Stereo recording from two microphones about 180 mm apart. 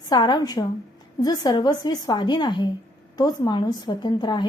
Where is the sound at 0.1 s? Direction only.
25° left (ahead or behind).